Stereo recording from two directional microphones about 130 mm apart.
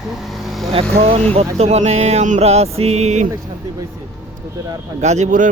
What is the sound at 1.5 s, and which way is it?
Mantra, 55° right (ahead or behind).